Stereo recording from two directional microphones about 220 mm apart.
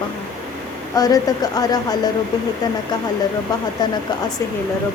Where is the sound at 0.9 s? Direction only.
15° left (ahead or behind).